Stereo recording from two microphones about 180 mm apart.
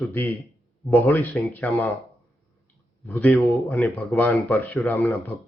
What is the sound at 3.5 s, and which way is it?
Speech, centre (ahead or behind).